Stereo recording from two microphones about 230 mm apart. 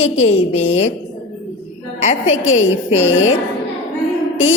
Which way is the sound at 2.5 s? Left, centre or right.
Left.